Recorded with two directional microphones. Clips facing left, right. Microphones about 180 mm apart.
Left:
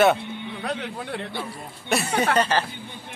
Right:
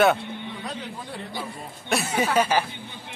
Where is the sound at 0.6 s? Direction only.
65° left (ahead or behind).